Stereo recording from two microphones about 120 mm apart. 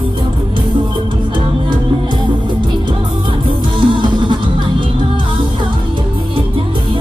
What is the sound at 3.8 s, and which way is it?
Music, 45° right (ahead or behind).